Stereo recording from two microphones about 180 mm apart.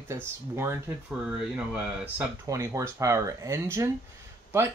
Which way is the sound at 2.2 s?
15° right (ahead or behind).